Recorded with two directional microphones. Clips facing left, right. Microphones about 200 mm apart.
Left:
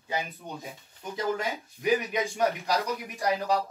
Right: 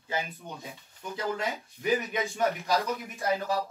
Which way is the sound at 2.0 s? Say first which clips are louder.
Left 2 dB; 15° left (ahead or behind).